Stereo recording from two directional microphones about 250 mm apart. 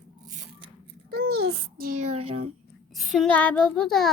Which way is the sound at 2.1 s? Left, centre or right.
Right.